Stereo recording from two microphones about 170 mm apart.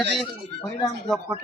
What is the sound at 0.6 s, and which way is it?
Speech, 25° left (ahead or behind).